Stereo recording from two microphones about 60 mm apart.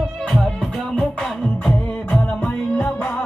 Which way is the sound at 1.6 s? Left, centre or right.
Left.